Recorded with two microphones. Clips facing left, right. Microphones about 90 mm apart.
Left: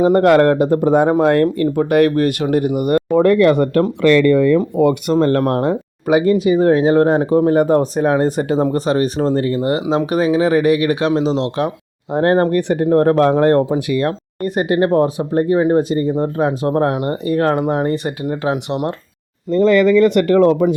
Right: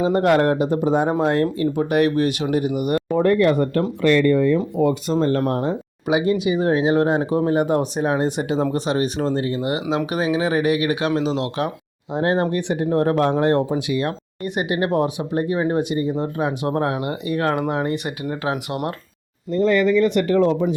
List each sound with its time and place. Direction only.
0.0 s speech: 50° left (ahead or behind)
3.2 s speech: 90° left
4.0 s speech: 90° left; by 5.4 s 70° left (ahead or behind)
5.4 s speech: 55° left (ahead or behind); by 11.7 s 30° left (ahead or behind)
12.1 s speech: 60° left (ahead or behind); by 18.8 s 30° left (ahead or behind)
19.5 s speech: 90° left; by 20.7 s 65° left (ahead or behind)